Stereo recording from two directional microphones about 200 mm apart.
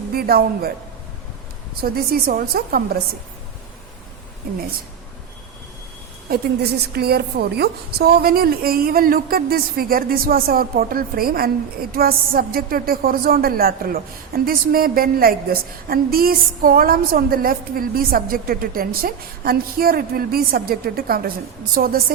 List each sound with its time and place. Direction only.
0.1 s a man's voice: 50° right (ahead or behind)
1.8 s a woman's voice: 45° right (ahead or behind)
6.3 s a woman's voice: 55° right (ahead or behind)